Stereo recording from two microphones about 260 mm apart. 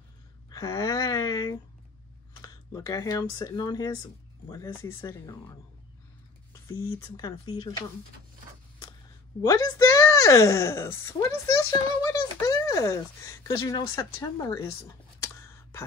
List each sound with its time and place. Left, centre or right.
0.5 s a sound: centre
2.4 s speech: centre
9.4 s speech: centre